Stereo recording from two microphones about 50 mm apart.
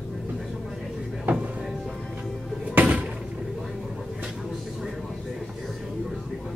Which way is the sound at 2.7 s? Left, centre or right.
Right.